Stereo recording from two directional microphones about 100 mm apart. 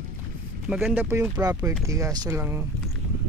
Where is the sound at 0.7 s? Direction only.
10° right (ahead or behind).